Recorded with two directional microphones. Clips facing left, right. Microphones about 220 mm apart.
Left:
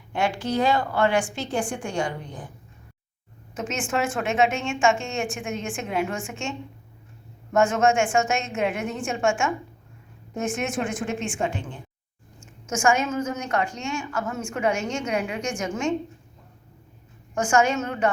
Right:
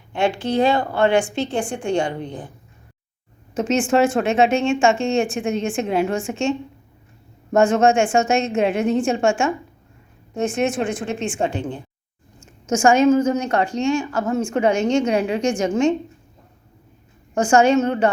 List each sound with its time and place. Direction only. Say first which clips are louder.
0.2 s a woman's voice: right 5 dB; 25° right (ahead or behind)
3.5 s a woman's voice: right 9 dB; 35° right (ahead or behind)
7.5 s a woman's voice: right 5 dB; 35° right (ahead or behind)
17.3 s a woman's voice: right 7 dB; 35° right (ahead or behind)